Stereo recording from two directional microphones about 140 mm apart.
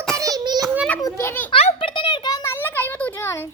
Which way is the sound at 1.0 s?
20° left (ahead or behind).